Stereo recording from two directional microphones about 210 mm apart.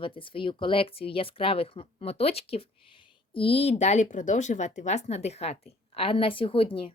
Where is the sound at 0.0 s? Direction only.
25° left (ahead or behind).